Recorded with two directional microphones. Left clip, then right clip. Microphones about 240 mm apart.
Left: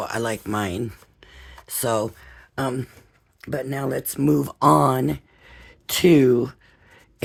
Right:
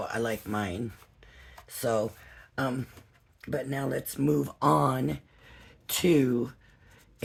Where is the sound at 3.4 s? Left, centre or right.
Left.